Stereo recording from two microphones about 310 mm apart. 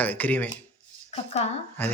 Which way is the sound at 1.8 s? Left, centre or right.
Centre.